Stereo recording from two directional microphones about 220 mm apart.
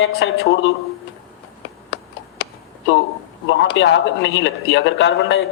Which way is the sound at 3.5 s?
55° left (ahead or behind).